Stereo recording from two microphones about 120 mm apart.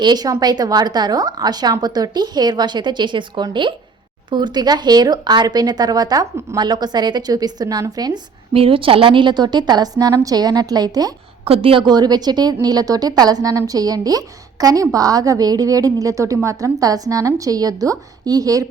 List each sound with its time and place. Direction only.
0.0 s a woman's voice: 35° right (ahead or behind)
8.5 s a woman's voice: 50° right (ahead or behind); by 11.1 s 35° right (ahead or behind)
11.4 s a woman's voice: 50° right (ahead or behind); by 18.6 s 30° right (ahead or behind)